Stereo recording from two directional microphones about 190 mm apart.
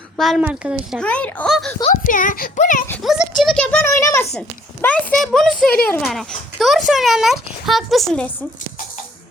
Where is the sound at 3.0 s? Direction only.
Centre (ahead or behind).